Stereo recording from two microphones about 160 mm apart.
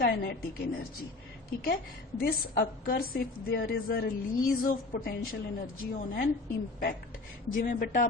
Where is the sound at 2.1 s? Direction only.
75° left (ahead or behind).